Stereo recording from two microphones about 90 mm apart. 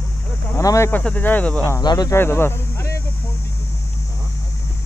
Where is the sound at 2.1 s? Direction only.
25° left (ahead or behind).